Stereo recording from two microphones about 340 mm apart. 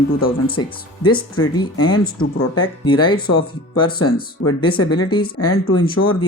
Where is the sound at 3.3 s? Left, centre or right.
Left.